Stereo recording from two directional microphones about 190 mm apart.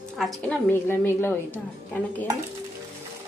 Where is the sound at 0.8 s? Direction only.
10° left (ahead or behind).